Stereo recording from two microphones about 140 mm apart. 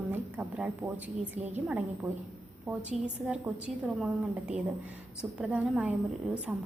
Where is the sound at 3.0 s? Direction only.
10° right (ahead or behind).